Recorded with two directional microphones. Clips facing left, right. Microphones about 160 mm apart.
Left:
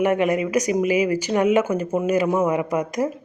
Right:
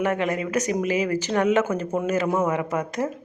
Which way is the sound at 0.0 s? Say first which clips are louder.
Left 4 dB; 15° left (ahead or behind).